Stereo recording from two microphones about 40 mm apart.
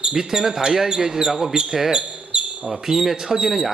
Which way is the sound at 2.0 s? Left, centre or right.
Right.